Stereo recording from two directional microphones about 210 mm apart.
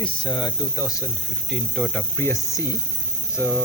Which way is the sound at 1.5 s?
5° left (ahead or behind).